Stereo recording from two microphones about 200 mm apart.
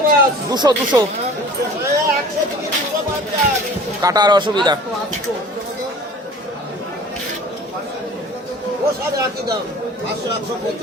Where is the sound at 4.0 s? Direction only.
20° right (ahead or behind).